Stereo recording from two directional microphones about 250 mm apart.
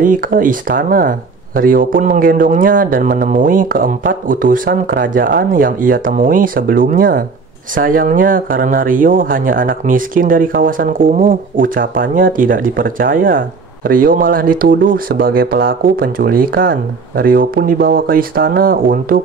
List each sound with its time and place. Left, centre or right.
0.0 s speech: right